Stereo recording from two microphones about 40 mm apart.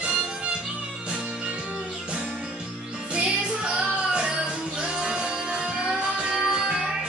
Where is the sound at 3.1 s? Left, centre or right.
Centre.